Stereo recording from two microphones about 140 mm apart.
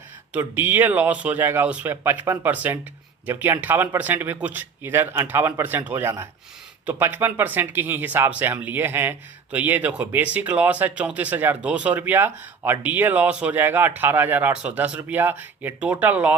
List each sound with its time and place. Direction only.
0.3 s speech: 10° right (ahead or behind)